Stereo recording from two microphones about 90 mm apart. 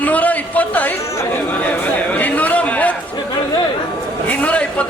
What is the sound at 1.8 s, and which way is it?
Chatter, 20° left (ahead or behind).